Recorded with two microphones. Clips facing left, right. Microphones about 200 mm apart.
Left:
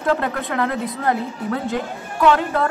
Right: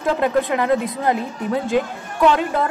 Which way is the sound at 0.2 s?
15° right (ahead or behind).